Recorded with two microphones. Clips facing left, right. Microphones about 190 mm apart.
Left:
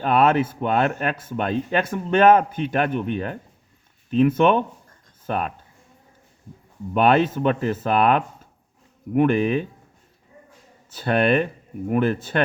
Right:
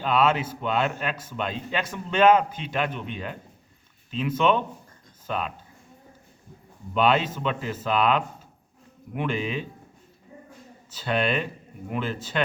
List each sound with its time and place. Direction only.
0.0 s a man's voice: 55° left (ahead or behind)
6.9 s a man's voice: 55° left (ahead or behind)
10.9 s speech: 55° left (ahead or behind)